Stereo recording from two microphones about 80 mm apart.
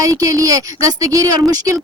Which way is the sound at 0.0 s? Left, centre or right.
Right.